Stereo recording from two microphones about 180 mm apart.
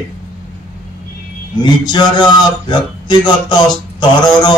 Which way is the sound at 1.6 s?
25° left (ahead or behind).